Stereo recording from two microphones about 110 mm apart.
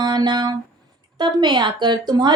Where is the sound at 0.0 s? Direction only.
40° right (ahead or behind).